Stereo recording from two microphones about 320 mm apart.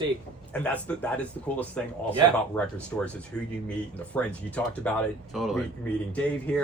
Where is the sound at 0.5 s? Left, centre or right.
Centre.